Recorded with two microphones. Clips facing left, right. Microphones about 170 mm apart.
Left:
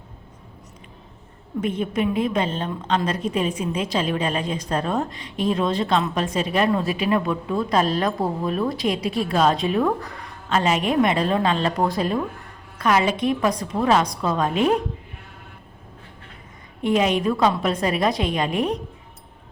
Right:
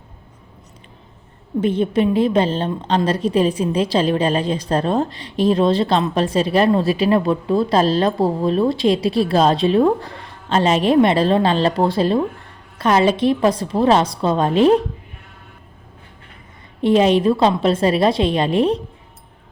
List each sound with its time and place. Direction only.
1.6 s a woman's voice: 30° right (ahead or behind)
16.8 s a woman's voice: 30° right (ahead or behind)